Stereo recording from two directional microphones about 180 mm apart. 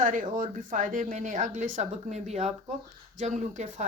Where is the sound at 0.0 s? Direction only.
45° right (ahead or behind).